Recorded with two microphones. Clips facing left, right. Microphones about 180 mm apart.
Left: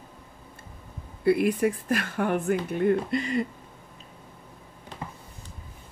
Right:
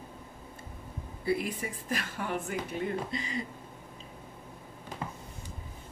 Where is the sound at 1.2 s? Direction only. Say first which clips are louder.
Left 10 dB; 65° left (ahead or behind).